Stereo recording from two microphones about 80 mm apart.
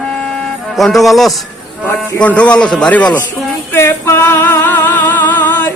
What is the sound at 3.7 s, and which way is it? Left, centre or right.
Music, left.